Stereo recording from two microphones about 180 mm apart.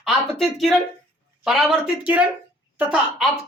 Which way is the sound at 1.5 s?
Centre (ahead or behind).